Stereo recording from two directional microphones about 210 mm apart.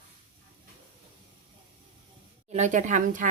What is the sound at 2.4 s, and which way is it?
Speech, 35° right (ahead or behind).